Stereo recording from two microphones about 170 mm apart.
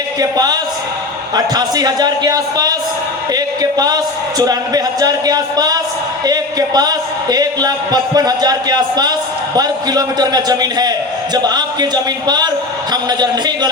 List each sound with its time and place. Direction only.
0.2 s a man's voice: 25° right (ahead or behind)
12.9 s a man's voice: 25° right (ahead or behind)